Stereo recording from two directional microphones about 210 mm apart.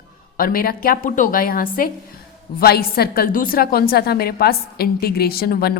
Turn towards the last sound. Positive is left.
turn(degrees=45)  # may be behind; listen again after turning